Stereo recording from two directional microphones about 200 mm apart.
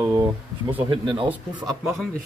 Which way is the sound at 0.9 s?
25° right (ahead or behind).